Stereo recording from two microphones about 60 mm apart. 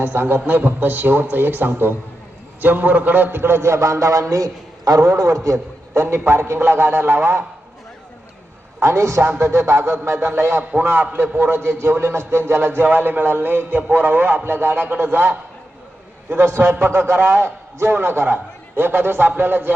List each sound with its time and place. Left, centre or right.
0.0 s a man's voice: right
6.5 s a man's voice: right
8.8 s a man's voice: right
9.2 s a man's voice: right
10.6 s a man's voice: right